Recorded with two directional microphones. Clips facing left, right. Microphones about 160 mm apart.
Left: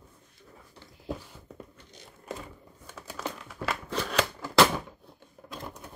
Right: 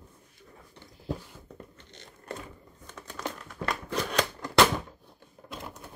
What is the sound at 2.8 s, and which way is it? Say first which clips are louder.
Crumpling: even; 5° left (ahead or behind).